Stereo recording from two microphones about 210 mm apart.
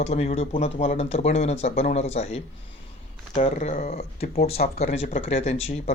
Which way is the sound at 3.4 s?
35° left (ahead or behind).